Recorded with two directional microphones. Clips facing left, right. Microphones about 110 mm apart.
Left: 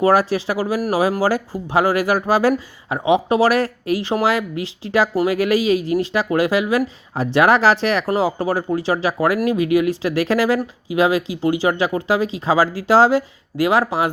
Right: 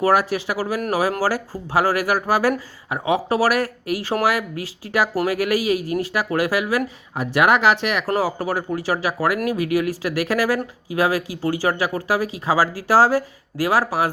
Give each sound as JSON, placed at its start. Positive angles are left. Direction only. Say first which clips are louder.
{"t": 0.0, "sound": "speech", "louder": "left 3 dB", "side_deg": 30}